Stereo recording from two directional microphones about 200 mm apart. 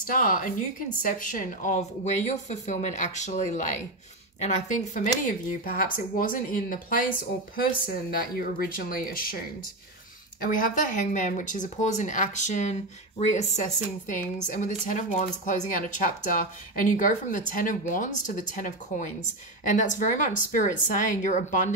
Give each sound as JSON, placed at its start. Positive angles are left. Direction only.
{"t": 0.0, "sound": "a woman's voice", "side_deg": 45}
{"t": 10.4, "sound": "a woman's voice", "side_deg": 40}